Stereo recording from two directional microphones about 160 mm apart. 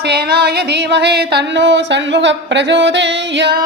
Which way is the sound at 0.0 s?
85° right.